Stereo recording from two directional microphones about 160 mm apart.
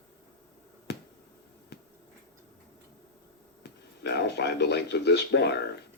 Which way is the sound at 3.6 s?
90° left.